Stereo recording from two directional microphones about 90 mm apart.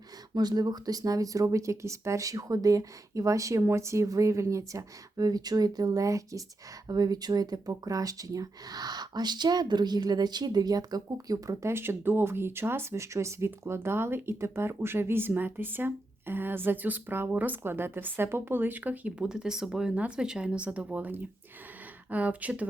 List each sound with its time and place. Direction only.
0.3 s speech: 50° right (ahead or behind); by 22.6 s 15° right (ahead or behind)